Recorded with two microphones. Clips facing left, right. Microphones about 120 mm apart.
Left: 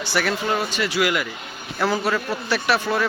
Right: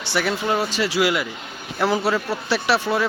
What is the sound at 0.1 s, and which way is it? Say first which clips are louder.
A man's voice: right 1 dB; 20° right (ahead or behind).